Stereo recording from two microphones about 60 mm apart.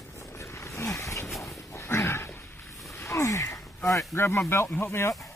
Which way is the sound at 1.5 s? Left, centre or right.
Left.